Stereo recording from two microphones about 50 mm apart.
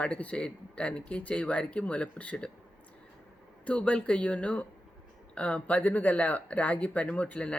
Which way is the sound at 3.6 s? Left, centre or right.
Left.